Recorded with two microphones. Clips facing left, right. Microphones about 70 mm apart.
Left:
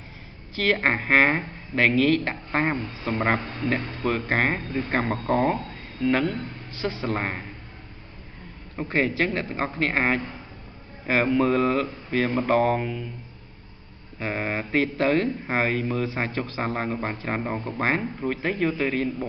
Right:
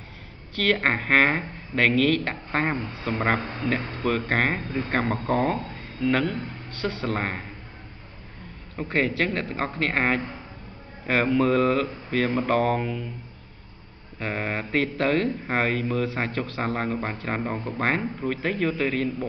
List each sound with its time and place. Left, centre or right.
0.6 s speech: centre
3.3 s speech: right
3.6 s speech: centre
8.7 s speech: centre
14.2 s speech: centre